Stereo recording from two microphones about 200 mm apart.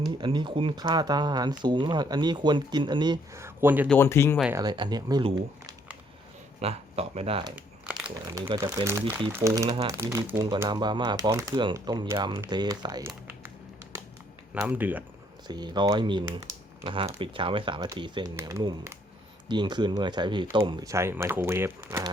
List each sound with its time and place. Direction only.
0.0 s speech: 25° right (ahead or behind)
3.8 s speech: 10° left (ahead or behind)
4.5 s speech: 20° right (ahead or behind)
6.6 s speech: 30° right (ahead or behind)
7.5 s crumpling: 5° right (ahead or behind)
8.1 s speech: 20° right (ahead or behind)
14.5 s speech: 10° right (ahead or behind)
15.4 s speech: 20° right (ahead or behind)